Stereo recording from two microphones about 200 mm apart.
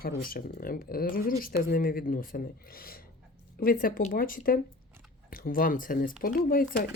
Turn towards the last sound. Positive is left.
turn(degrees=45)  # may be behind; listen again after turning